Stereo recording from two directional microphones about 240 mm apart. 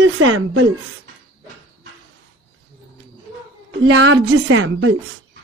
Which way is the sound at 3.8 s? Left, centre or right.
Right.